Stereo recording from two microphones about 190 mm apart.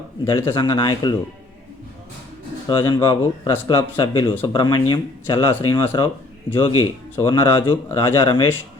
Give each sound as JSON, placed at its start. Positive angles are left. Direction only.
{"t": 0.3, "sound": "speech", "side_deg": 25}
{"t": 2.6, "sound": "speech", "side_deg": 25}